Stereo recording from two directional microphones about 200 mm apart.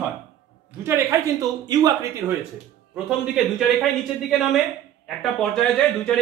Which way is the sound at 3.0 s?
5° right (ahead or behind).